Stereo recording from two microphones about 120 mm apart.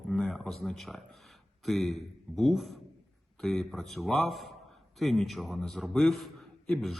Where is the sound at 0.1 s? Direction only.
Centre (ahead or behind).